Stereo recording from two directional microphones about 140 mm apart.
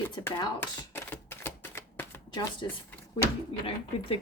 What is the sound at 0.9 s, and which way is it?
Typewriter, 15° left (ahead or behind).